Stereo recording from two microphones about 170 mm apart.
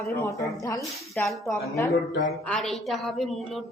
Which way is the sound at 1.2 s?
10° left (ahead or behind).